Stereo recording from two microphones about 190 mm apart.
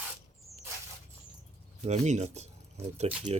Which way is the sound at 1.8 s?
35° right (ahead or behind).